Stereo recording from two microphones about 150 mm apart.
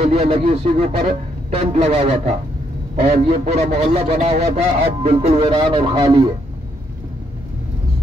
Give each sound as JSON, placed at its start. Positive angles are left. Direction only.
{"t": 0.0, "sound": "a man's voice", "side_deg": -40}